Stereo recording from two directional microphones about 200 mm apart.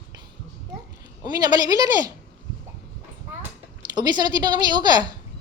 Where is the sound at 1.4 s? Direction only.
20° right (ahead or behind).